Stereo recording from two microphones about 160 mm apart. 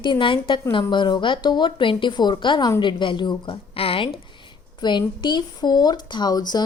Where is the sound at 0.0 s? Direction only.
30° left (ahead or behind).